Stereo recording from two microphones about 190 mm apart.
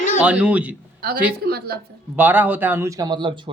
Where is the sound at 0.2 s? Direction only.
5° right (ahead or behind).